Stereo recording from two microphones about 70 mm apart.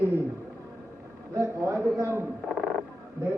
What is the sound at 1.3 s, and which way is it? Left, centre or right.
Speech, right.